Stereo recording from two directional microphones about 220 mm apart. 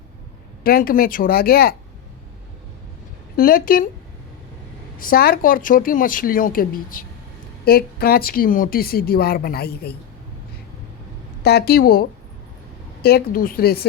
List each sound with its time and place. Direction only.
0.6 s a woman's voice: 40° left (ahead or behind)
3.3 s a woman's voice: 40° left (ahead or behind)
4.9 s a woman's voice: 40° left (ahead or behind)
11.4 s a woman's voice: 45° left (ahead or behind)